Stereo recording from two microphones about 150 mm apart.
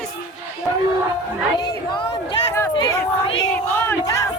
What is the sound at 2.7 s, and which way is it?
Crowd, 30° left (ahead or behind).